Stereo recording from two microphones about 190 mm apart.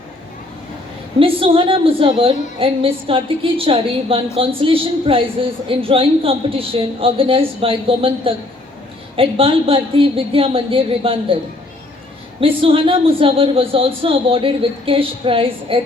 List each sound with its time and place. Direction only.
1.2 s a woman's voice: 30° right (ahead or behind)
12.4 s a woman's voice: 30° right (ahead or behind)